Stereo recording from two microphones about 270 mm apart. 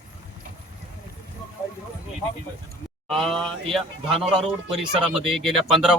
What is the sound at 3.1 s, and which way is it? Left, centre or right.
Speech, centre.